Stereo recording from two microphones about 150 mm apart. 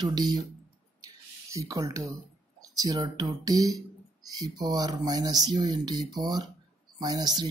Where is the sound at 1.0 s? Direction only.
20° right (ahead or behind).